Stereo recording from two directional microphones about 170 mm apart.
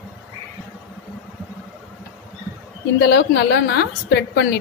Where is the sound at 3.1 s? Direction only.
80° left.